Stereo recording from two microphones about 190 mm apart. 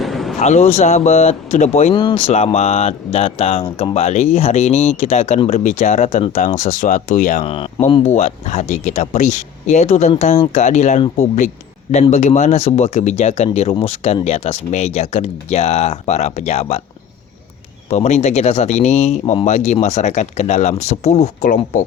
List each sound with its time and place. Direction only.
0.0 s a sound: centre (ahead or behind)
0.3 s speech: 35° left (ahead or behind)
7.4 s speech: 30° left (ahead or behind)
17.8 s speech: 35° left (ahead or behind)